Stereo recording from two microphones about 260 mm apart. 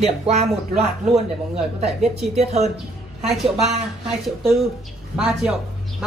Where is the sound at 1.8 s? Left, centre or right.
Centre.